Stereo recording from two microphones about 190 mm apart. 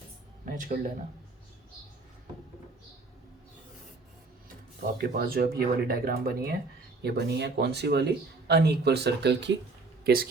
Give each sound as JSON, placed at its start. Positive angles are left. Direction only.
{"t": 0.4, "sound": "speech", "side_deg": -45}
{"t": 4.9, "sound": "speech", "side_deg": -50}
{"t": 10.0, "sound": "speech", "side_deg": -50}